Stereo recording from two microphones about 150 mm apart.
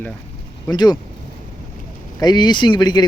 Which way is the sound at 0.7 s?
30° left (ahead or behind).